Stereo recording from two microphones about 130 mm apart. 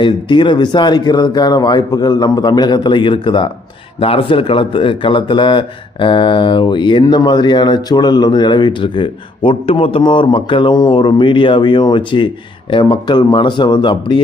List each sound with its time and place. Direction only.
0.0 s a man's voice: 40° left (ahead or behind)